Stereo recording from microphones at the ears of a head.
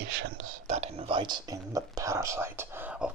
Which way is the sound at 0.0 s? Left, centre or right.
Right.